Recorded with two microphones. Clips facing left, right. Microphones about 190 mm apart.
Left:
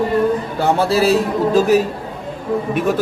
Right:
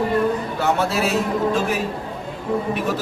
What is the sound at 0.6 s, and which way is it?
A man's voice, 30° left (ahead or behind).